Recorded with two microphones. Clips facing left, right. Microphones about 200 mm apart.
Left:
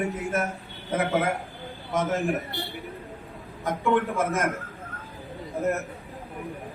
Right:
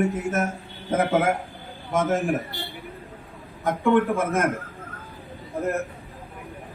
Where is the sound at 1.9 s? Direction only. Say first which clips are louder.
Right 3 dB; 50° right (ahead or behind).